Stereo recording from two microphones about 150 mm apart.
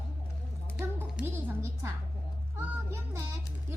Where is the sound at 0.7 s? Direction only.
10° right (ahead or behind).